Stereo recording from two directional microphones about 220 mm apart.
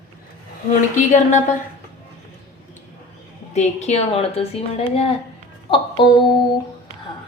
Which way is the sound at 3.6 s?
30° left (ahead or behind).